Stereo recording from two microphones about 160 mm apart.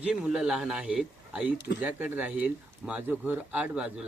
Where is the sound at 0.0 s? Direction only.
5° right (ahead or behind).